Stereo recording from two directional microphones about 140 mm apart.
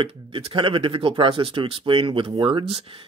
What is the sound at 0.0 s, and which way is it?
Speech, 40° right (ahead or behind).